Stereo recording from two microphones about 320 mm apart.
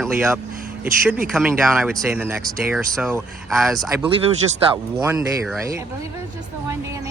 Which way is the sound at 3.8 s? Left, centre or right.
Centre.